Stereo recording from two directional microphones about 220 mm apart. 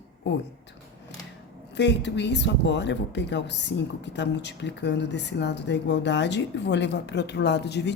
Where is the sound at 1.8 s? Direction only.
50° left (ahead or behind).